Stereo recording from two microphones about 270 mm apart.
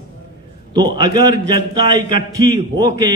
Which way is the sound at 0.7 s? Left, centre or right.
Centre.